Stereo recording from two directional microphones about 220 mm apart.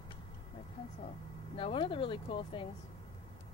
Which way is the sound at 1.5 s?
25° left (ahead or behind).